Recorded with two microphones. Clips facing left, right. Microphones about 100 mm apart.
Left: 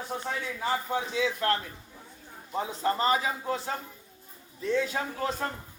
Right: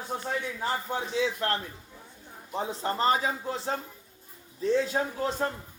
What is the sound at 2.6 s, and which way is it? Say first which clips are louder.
A man's voice: left 1 dB; 35° right (ahead or behind).